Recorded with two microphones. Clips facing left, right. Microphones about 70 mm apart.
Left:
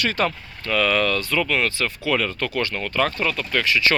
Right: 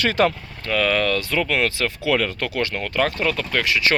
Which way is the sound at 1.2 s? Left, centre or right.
Right.